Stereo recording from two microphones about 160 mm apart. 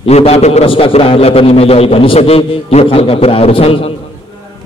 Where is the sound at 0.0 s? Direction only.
40° left (ahead or behind).